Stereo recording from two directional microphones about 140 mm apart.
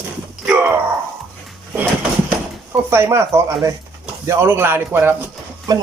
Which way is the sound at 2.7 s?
15° right (ahead or behind).